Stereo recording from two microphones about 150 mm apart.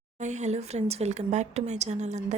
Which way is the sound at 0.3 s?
50° right (ahead or behind).